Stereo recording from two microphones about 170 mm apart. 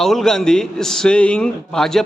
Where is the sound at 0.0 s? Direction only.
Centre (ahead or behind).